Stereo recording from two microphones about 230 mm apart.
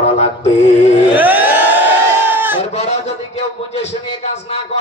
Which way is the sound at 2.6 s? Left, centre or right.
Left.